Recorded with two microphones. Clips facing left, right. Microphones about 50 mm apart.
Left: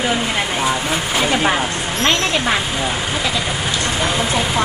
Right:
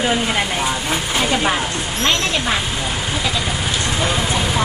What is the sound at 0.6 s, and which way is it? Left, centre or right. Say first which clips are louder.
Speech: left 2 dB; centre.